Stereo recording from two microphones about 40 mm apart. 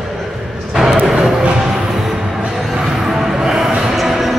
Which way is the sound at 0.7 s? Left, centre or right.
Centre.